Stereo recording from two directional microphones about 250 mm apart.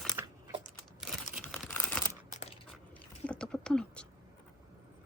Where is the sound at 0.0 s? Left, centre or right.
Centre.